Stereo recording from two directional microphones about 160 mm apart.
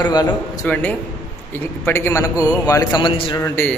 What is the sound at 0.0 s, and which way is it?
Speech, 25° left (ahead or behind).